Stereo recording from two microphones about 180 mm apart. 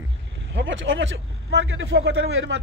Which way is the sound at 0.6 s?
90° right.